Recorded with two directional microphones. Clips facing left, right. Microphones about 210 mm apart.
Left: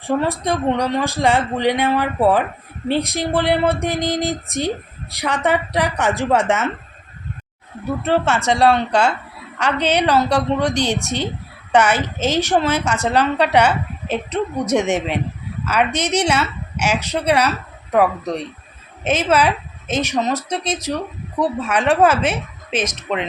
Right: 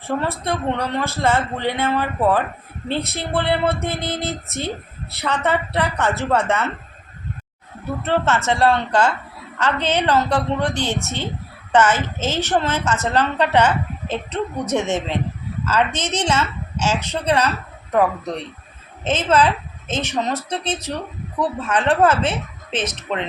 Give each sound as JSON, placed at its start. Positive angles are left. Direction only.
{"t": 0.1, "sound": "a woman's voice", "side_deg": 15}
{"t": 8.0, "sound": "a woman's voice", "side_deg": 10}
{"t": 19.0, "sound": "a woman's voice", "side_deg": 10}